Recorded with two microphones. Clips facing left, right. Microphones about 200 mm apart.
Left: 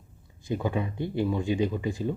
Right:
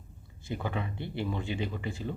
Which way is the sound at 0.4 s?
15° left (ahead or behind).